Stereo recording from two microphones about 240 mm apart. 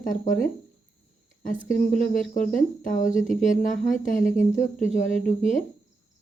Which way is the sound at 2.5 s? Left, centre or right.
Left.